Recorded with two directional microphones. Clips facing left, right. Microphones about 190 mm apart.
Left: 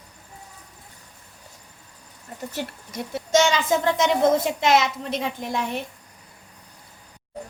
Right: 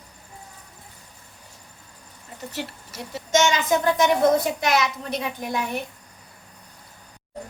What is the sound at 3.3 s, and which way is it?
A child's voice, 30° left (ahead or behind).